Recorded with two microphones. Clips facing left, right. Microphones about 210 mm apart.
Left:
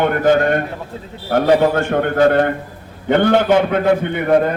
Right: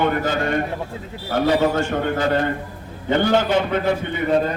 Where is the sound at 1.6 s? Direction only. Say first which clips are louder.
Left 4 dB; 60° left (ahead or behind).